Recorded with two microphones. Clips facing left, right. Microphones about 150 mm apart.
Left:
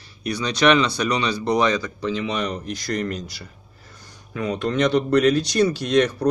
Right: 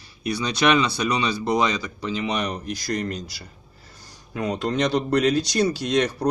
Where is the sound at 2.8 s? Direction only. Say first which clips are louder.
Left 2 dB; 35° right (ahead or behind).